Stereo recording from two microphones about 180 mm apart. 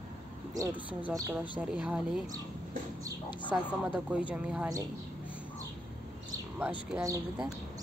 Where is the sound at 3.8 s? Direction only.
5° right (ahead or behind).